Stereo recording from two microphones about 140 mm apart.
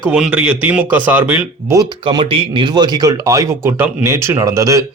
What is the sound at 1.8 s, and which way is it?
Speech, 30° right (ahead or behind).